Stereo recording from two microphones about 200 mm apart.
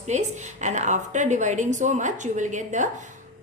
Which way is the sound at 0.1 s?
35° right (ahead or behind).